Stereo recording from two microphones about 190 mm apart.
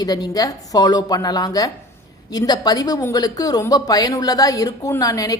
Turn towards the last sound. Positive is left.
turn(degrees=20)  # may be behind; listen again after turning